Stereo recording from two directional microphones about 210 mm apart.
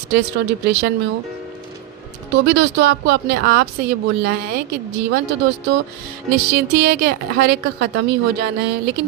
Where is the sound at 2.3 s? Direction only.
55° right (ahead or behind).